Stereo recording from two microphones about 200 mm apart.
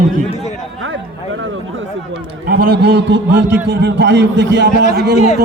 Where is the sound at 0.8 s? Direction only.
75° right (ahead or behind).